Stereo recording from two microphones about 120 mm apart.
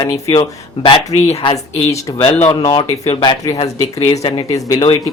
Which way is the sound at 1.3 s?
60° left (ahead or behind).